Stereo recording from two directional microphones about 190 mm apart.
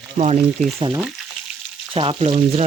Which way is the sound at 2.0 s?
30° right (ahead or behind).